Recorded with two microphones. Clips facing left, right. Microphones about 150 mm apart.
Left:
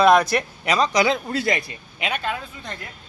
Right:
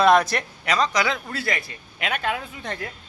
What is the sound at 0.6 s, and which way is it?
Speech, 10° left (ahead or behind).